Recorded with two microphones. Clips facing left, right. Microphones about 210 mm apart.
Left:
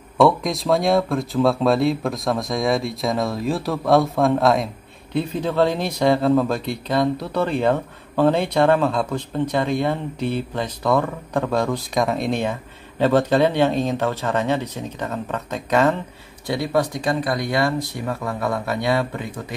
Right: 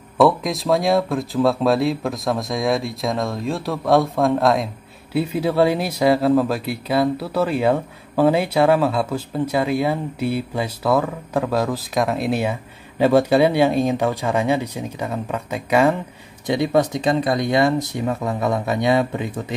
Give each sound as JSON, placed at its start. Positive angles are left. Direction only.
{"t": 0.2, "sound": "speech", "side_deg": 0}
{"t": 16.4, "sound": "speech", "side_deg": -20}